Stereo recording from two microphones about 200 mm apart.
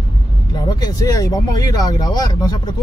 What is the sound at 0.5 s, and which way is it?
Speech, 20° left (ahead or behind).